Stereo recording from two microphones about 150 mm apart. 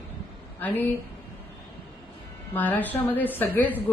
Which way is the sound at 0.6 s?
10° left (ahead or behind).